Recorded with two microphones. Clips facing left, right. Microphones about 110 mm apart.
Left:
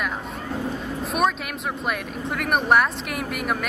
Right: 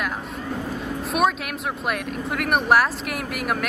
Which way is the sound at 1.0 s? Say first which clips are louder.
Right 1 dB; centre (ahead or behind).